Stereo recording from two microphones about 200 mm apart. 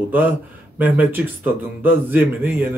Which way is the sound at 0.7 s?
10° right (ahead or behind).